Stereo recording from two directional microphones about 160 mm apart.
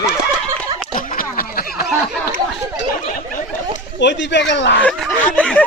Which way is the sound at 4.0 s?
90° left.